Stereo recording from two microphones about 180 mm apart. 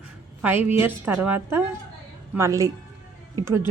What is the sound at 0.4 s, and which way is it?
A woman's voice, 10° right (ahead or behind).